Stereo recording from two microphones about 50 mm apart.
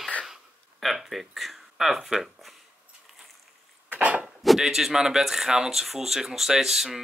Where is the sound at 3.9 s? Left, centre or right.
Right.